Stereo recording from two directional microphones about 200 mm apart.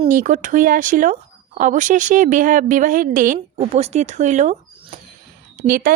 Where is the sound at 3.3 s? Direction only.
30° right (ahead or behind).